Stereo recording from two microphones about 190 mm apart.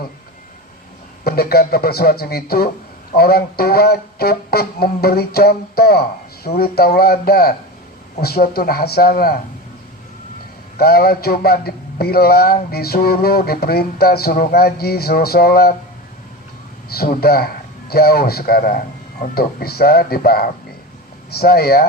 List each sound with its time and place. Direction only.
1.2 s a man's voice: 55° left (ahead or behind)
10.8 s speech: 55° left (ahead or behind)
16.9 s a man's voice: 55° left (ahead or behind)